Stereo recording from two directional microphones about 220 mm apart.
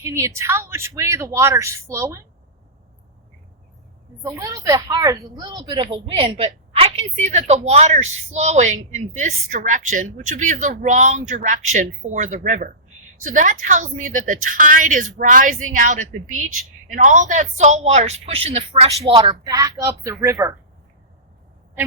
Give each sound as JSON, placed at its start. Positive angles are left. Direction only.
{"t": 0.0, "sound": "a woman's voice", "side_deg": -15}
{"t": 4.2, "sound": "a woman's voice", "side_deg": -15}